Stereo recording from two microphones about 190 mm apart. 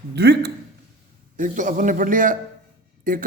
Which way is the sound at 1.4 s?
45° right (ahead or behind).